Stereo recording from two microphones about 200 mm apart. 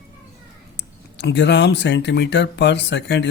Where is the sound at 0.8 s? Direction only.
60° left (ahead or behind).